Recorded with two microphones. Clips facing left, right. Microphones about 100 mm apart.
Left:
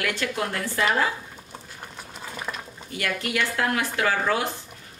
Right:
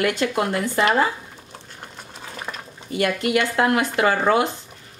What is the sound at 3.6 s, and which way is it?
Speech, 20° right (ahead or behind).